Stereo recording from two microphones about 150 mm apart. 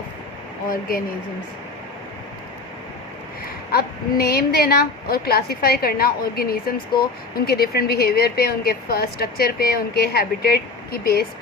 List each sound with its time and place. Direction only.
0.7 s speech: 75° left (ahead or behind)
3.7 s speech: 90° left